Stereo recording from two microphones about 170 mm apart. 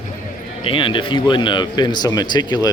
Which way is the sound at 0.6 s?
30° left (ahead or behind).